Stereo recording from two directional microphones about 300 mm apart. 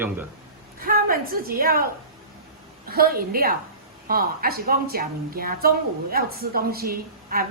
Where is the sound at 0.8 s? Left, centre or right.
Right.